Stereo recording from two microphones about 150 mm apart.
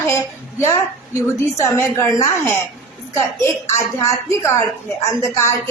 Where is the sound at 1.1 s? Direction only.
20° left (ahead or behind).